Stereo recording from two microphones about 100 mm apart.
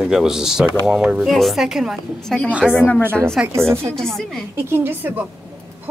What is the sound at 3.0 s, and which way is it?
Speech, 20° right (ahead or behind).